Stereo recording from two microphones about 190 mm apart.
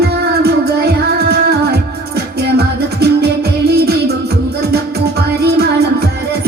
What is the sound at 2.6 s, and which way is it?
Music, 60° right (ahead or behind).